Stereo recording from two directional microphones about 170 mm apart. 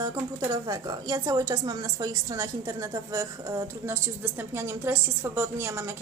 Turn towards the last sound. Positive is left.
turn(degrees=-15)  # may be behind; listen again after turning